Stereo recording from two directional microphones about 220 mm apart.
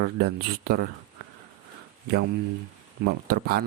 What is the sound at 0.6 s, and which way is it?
Speech, 45° right (ahead or behind).